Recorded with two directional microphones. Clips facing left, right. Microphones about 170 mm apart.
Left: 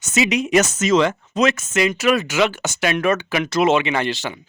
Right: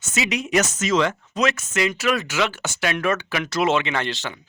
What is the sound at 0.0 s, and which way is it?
Speech, 20° left (ahead or behind).